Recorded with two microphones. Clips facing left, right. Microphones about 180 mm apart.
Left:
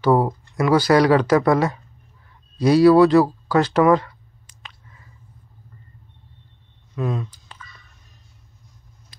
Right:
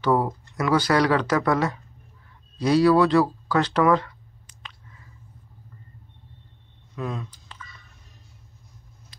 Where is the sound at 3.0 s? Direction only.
10° left (ahead or behind).